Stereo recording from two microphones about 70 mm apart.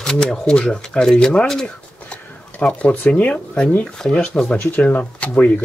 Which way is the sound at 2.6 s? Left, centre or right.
Left.